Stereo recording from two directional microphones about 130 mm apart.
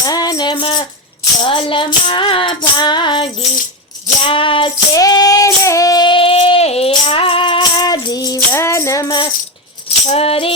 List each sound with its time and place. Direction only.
0.0 s music: 30° left (ahead or behind)
4.9 s female singing: 30° left (ahead or behind)
8.4 s music: 20° left (ahead or behind)
10.1 s music: 50° left (ahead or behind)